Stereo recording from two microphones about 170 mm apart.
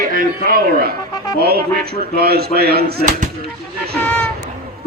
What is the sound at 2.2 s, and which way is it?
Speech, 65° right (ahead or behind).